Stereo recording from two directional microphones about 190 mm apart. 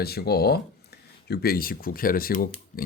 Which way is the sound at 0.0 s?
55° left (ahead or behind).